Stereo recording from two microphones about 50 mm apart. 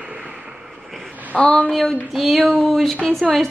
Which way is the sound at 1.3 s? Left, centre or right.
Left.